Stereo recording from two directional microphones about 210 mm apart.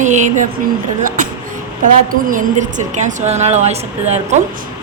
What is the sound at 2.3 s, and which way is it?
A woman's voice, 35° right (ahead or behind).